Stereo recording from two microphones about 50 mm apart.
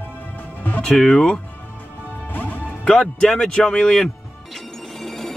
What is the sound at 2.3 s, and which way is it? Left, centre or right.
Music, left.